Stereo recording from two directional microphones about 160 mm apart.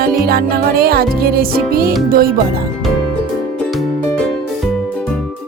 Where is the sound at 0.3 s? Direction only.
70° right (ahead or behind).